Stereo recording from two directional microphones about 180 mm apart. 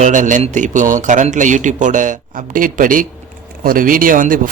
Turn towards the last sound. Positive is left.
turn(degrees=-50)  # may be behind; listen again after turning